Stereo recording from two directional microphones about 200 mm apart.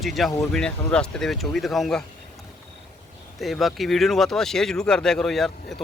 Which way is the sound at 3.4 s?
Centre (ahead or behind).